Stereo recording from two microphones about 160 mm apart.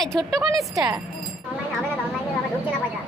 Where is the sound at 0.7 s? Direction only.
25° right (ahead or behind).